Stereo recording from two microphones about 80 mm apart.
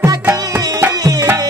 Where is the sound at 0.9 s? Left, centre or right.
Right.